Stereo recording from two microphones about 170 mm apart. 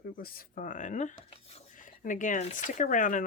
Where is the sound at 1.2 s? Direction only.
35° left (ahead or behind).